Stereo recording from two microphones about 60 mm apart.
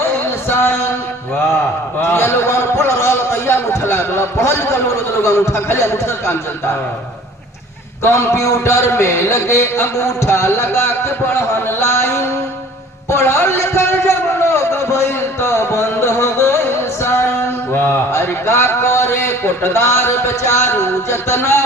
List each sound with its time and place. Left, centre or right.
0.0 s music: left
2.0 s a man's voice: left
8.0 s a man's voice: left
13.1 s a sound: left
17.7 s a sound: left
18.1 s speech: left